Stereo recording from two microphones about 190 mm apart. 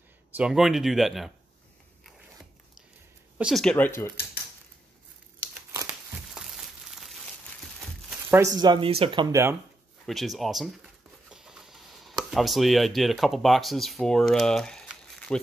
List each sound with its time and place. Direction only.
0.4 s speech: centre (ahead or behind)
3.3 s speech: centre (ahead or behind)
5.4 s crumpling: 10° right (ahead or behind)
8.5 s speech: 25° right (ahead or behind)
10.0 s speech: centre (ahead or behind)
11.2 s a sound: 5° right (ahead or behind)